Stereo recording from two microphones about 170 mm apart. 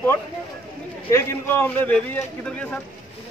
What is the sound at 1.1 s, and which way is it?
A man's voice, 15° left (ahead or behind).